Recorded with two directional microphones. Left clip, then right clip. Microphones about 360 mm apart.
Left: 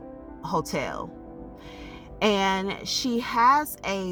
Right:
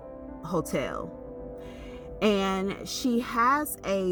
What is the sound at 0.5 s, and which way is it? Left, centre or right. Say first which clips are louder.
Speech: left 2 dB; left.